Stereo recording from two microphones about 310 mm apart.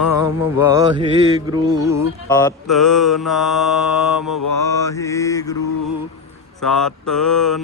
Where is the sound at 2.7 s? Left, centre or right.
Centre.